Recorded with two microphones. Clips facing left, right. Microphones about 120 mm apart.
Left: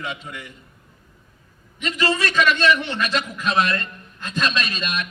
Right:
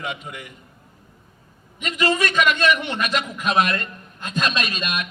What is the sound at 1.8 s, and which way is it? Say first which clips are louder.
A man's voice: right 1 dB; 30° left (ahead or behind).